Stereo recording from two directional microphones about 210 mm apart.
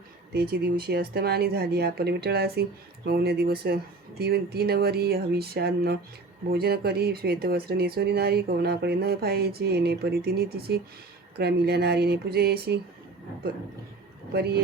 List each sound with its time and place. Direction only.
0.6 s speech: 50° right (ahead or behind)
14.3 s speech: 50° right (ahead or behind)